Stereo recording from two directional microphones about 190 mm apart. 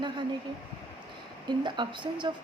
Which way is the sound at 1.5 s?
25° right (ahead or behind).